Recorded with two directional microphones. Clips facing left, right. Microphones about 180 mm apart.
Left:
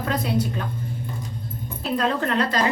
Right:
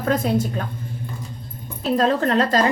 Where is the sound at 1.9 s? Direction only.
40° right (ahead or behind).